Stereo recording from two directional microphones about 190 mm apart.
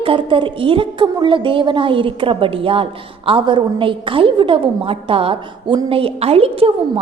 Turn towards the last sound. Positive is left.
turn(degrees=-30)  # may be behind; listen again after turning